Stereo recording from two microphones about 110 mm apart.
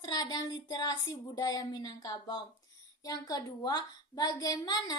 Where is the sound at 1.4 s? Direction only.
35° left (ahead or behind).